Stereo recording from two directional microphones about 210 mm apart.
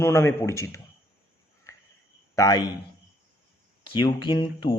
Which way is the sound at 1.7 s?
15° left (ahead or behind).